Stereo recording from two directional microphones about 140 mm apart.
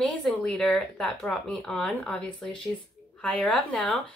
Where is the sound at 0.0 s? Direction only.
5° left (ahead or behind).